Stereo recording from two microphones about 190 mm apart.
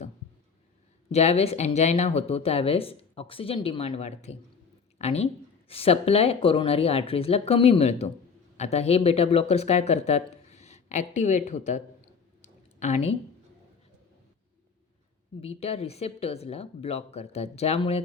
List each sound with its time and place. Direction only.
1.1 s speech: 35° left (ahead or behind)
12.4 s a sound: 35° left (ahead or behind)
15.4 s speech: 30° left (ahead or behind)